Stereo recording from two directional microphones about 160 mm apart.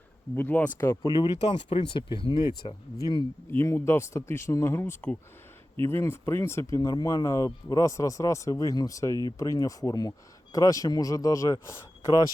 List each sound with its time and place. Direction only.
0.3 s speech: 10° left (ahead or behind)
1.4 s speech: 35° left (ahead or behind)
3.5 s speech: 15° left (ahead or behind)